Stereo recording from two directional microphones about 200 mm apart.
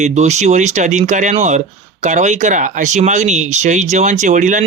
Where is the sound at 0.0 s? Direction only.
35° right (ahead or behind).